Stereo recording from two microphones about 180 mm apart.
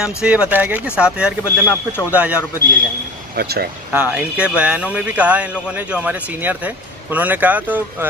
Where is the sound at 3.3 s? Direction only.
60° right (ahead or behind).